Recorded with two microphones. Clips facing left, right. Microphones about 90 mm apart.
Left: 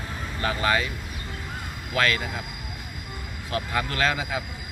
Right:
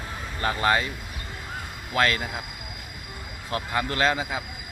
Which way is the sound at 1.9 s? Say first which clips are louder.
Right 1 dB; 30° right (ahead or behind).